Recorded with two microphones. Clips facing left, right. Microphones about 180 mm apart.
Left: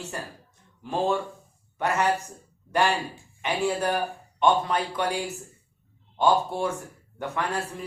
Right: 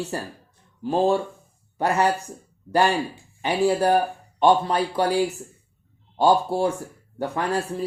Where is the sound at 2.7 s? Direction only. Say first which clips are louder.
Right 4 dB; 35° right (ahead or behind).